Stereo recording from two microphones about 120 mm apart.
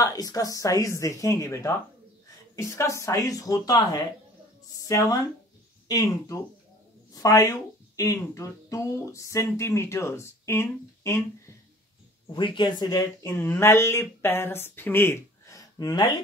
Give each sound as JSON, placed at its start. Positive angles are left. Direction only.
{"t": 0.0, "sound": "speech", "side_deg": 30}
{"t": 12.3, "sound": "speech", "side_deg": 40}
{"t": 13.3, "sound": "speech", "side_deg": 15}